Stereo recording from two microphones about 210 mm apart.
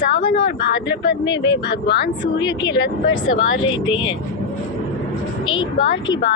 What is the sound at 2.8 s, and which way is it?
Speech, 55° left (ahead or behind).